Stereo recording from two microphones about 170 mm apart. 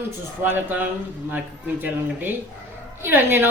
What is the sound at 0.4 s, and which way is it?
Speech, 10° right (ahead or behind).